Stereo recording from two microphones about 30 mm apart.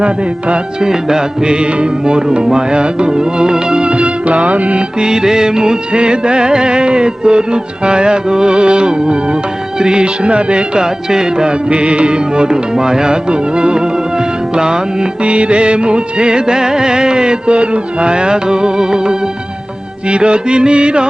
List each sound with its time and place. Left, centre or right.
0.0 s music: right
0.8 s music: centre; by 4.8 s right
4.9 s music: right
10.8 s music: right
15.2 s music: right
20.1 s music: right